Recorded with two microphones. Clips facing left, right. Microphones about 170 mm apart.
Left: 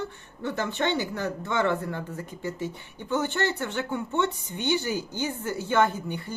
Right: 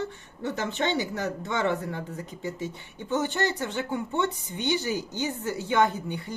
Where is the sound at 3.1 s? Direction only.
20° right (ahead or behind).